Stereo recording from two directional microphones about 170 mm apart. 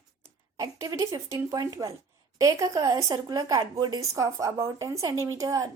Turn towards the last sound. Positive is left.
turn(degrees=-20)  # may be behind; listen again after turning